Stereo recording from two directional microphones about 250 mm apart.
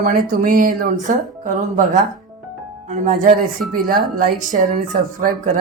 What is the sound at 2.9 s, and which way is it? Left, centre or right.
Speech, right.